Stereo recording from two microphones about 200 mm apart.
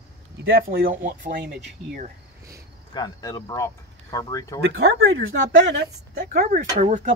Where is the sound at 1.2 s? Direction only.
60° right (ahead or behind).